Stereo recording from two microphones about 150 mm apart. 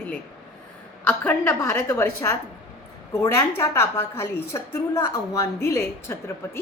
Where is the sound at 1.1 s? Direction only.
15° left (ahead or behind).